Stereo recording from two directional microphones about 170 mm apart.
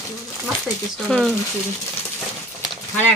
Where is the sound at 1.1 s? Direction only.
Centre (ahead or behind).